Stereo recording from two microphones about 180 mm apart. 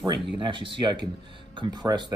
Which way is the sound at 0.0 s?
25° right (ahead or behind).